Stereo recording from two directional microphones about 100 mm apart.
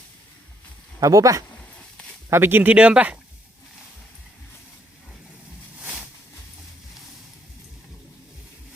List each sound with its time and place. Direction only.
0.9 s speech: 35° right (ahead or behind)
1.5 s a sound: 10° left (ahead or behind)
2.3 s speech: 20° right (ahead or behind)